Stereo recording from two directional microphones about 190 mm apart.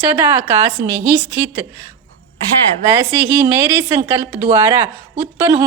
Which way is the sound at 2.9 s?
10° right (ahead or behind).